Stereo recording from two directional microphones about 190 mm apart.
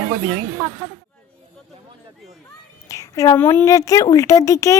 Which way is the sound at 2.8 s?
15° left (ahead or behind).